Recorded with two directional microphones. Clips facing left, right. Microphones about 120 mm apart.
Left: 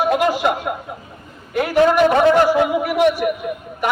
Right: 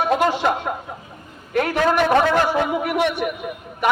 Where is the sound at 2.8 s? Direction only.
5° left (ahead or behind).